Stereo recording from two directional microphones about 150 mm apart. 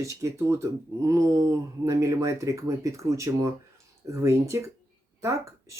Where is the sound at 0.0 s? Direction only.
20° right (ahead or behind).